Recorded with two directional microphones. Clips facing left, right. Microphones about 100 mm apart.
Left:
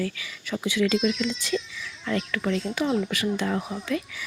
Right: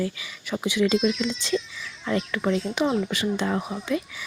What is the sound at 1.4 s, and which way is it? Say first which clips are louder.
Speech: right 2 dB; 25° right (ahead or behind).